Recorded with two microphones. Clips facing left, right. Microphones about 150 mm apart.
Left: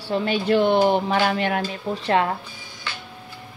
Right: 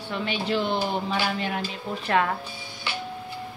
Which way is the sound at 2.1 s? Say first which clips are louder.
Left 3 dB; 30° left (ahead or behind).